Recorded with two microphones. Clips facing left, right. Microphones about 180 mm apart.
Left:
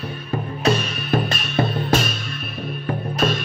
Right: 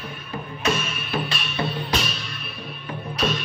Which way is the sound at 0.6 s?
35° left (ahead or behind).